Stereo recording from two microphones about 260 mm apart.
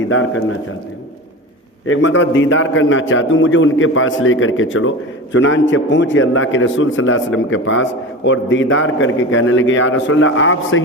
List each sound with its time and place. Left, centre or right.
0.1 s a man's voice: left
1.9 s a man's voice: left